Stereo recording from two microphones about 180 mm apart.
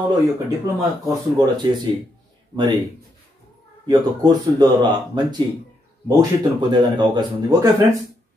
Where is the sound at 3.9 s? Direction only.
20° right (ahead or behind).